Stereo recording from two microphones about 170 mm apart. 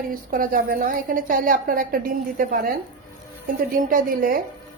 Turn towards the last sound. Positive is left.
turn(degrees=-55)  # may be behind; listen again after turning